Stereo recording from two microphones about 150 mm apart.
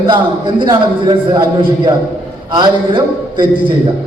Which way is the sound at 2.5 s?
30° right (ahead or behind).